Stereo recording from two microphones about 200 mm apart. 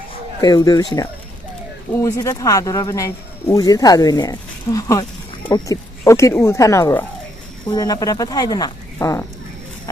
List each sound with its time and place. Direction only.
0.4 s speech: 20° left (ahead or behind)
1.9 s speech: 15° left (ahead or behind)